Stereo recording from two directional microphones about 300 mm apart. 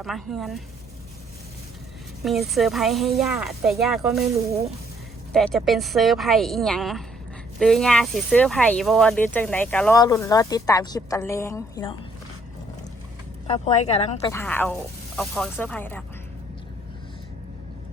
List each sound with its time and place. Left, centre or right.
0.0 s speech: centre
2.2 s speech: centre
5.3 s speech: centre
13.5 s speech: left
14.3 s speech: centre